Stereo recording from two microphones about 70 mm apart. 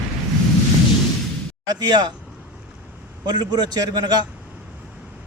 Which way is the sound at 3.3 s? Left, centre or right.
Right.